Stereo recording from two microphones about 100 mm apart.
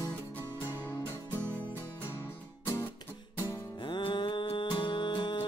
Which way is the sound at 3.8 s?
55° left (ahead or behind).